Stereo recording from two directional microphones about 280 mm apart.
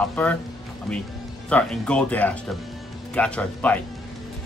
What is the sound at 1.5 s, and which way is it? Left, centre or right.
Speech, centre.